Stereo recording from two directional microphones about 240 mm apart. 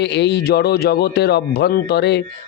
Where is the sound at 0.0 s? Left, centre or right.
Left.